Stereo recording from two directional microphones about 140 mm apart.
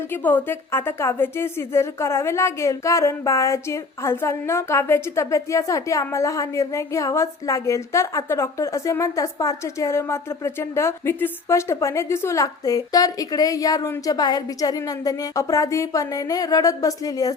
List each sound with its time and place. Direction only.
0.1 s a woman's voice: 15° left (ahead or behind)